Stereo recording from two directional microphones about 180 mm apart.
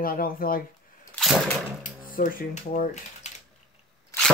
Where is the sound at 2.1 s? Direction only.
50° left (ahead or behind).